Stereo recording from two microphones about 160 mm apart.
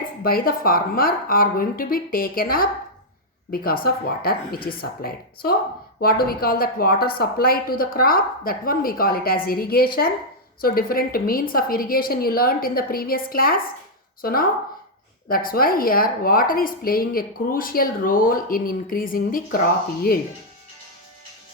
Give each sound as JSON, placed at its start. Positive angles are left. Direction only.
{"t": 0.2, "sound": "a woman's voice", "side_deg": 65}